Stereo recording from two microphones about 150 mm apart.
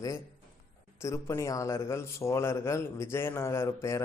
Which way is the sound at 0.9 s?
20° left (ahead or behind).